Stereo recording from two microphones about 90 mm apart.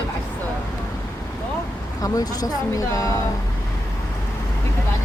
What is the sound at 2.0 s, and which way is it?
A woman's voice, 45° left (ahead or behind).